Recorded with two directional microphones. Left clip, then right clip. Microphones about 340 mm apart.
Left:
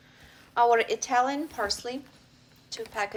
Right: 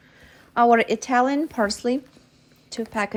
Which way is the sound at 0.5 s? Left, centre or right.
Centre.